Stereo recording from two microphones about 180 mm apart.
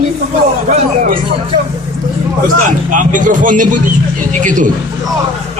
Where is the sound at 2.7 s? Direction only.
45° right (ahead or behind).